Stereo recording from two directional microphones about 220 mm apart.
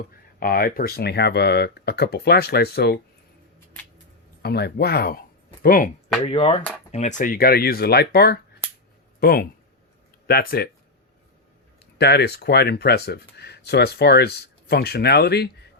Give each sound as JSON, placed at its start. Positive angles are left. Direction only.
{"t": 0.3, "sound": "speech", "side_deg": 40}
{"t": 4.4, "sound": "speech", "side_deg": 45}
{"t": 6.2, "sound": "speech", "side_deg": 30}
{"t": 11.9, "sound": "speech", "side_deg": 50}